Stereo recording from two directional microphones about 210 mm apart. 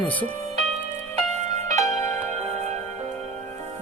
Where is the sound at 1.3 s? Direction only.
35° right (ahead or behind).